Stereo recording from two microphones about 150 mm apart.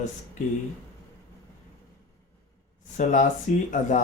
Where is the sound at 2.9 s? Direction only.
60° left (ahead or behind).